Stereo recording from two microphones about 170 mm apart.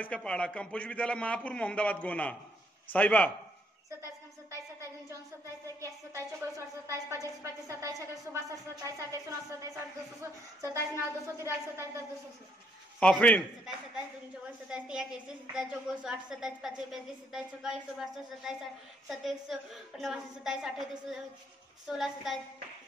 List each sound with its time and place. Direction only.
0.0 s a man's voice: 5° left (ahead or behind)
5.8 s a woman's voice: 15° right (ahead or behind)
13.0 s a man's voice: 5° left (ahead or behind)
14.7 s a woman's voice: 5° right (ahead or behind)